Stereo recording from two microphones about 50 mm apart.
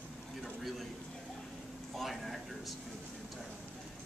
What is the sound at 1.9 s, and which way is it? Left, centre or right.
Speech, centre.